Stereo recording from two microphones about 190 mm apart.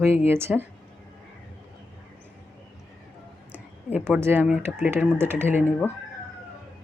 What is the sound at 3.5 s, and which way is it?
Speech, 10° right (ahead or behind).